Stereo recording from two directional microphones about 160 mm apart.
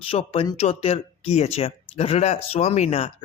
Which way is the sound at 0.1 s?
35° left (ahead or behind).